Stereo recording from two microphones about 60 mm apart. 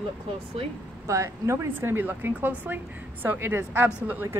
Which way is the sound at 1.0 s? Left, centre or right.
Right.